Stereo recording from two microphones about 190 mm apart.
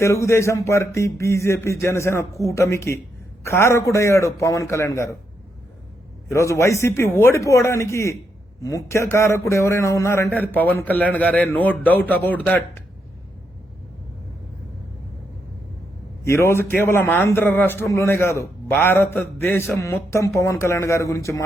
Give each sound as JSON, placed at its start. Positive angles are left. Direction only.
{"t": 0.0, "sound": "a man's voice", "side_deg": 15}
{"t": 6.3, "sound": "a man's voice", "side_deg": 15}
{"t": 16.2, "sound": "a man's voice", "side_deg": 15}